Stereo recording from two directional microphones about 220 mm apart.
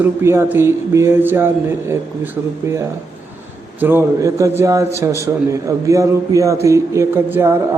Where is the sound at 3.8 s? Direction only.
10° right (ahead or behind).